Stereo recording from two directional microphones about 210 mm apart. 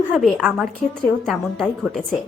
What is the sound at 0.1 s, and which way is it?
A woman's voice, centre (ahead or behind).